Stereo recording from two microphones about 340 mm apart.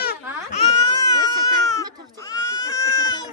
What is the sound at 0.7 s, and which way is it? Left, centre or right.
Baby cry, centre.